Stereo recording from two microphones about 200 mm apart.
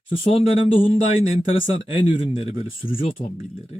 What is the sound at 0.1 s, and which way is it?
Speech, 30° left (ahead or behind).